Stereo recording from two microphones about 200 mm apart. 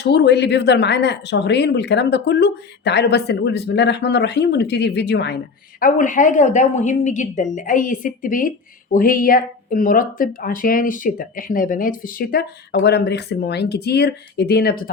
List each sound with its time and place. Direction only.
0.0 s speech: 55° left (ahead or behind)
5.8 s a woman's voice: 40° left (ahead or behind)